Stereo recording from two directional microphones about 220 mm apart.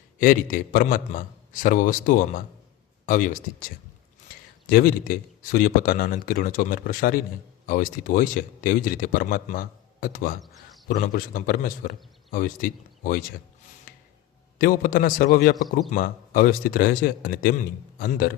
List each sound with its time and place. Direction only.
0.2 s speech: 40° left (ahead or behind)
14.6 s speech: 40° left (ahead or behind)